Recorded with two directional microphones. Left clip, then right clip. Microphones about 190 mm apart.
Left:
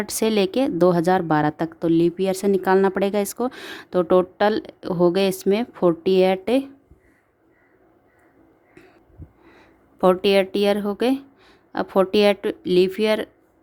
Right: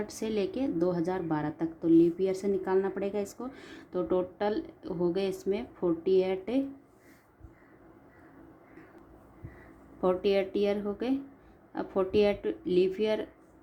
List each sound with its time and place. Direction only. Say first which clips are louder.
0.0 s a woman's voice: left 11 dB; 55° left (ahead or behind)
10.0 s a woman's voice: left 10 dB; 50° left (ahead or behind)